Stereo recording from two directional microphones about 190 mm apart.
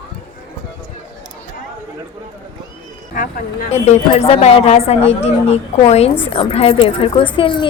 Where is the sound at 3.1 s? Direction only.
45° left (ahead or behind).